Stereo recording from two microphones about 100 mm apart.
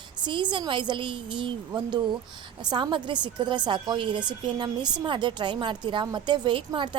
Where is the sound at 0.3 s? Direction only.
55° right (ahead or behind).